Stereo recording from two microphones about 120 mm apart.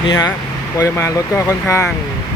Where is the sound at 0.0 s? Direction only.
40° left (ahead or behind).